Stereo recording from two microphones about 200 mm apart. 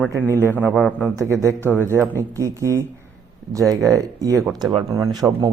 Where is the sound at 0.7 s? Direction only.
Centre (ahead or behind).